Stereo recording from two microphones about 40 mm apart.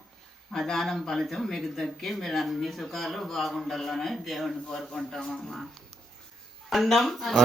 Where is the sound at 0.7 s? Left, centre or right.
Centre.